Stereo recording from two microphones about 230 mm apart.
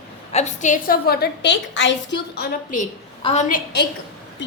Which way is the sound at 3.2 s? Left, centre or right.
Left.